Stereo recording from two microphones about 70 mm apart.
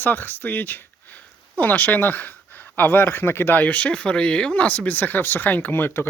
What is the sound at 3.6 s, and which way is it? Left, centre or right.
Speech, centre.